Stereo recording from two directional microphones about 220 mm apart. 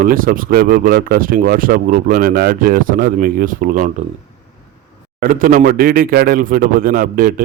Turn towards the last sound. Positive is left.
turn(degrees=-40)  # may be behind; listen again after turning